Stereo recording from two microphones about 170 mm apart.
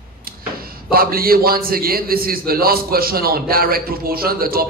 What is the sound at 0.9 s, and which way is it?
A man's voice, 60° right (ahead or behind).